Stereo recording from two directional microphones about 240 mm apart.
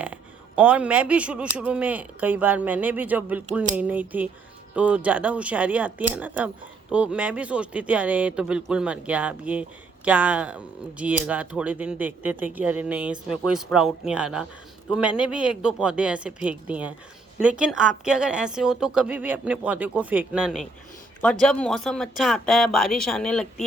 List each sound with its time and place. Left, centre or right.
0.0 s speech: centre